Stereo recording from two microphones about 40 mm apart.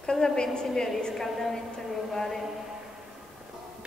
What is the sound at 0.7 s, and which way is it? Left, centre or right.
A woman's voice, centre.